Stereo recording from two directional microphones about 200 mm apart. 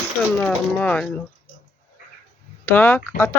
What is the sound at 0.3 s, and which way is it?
Speech, 5° left (ahead or behind).